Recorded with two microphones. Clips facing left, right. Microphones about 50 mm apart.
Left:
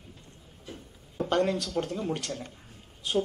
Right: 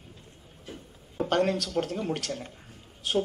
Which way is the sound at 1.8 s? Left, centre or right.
Centre.